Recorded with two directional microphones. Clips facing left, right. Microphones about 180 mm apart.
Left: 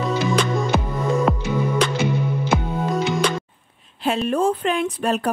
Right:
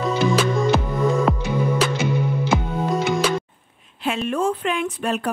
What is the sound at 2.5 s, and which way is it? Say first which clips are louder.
Music: even; 5° right (ahead or behind).